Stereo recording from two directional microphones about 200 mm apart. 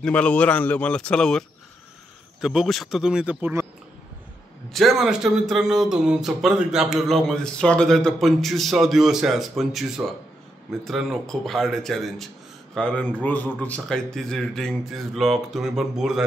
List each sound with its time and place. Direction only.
0.0 s a man's voice: 5° left (ahead or behind)
2.4 s speech: centre (ahead or behind)
4.6 s speech: centre (ahead or behind)